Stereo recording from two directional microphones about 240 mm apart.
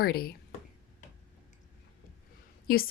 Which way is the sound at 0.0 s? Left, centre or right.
Left.